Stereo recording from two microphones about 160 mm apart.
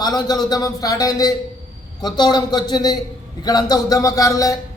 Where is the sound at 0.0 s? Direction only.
25° left (ahead or behind).